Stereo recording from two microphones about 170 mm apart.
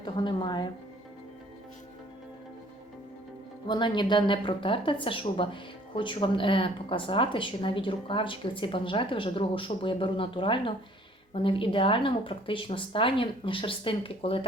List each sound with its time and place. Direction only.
0.0 s a woman's voice: 25° left (ahead or behind)
3.7 s a woman's voice: 25° left (ahead or behind)